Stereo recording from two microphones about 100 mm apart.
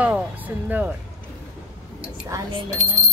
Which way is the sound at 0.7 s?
15° right (ahead or behind).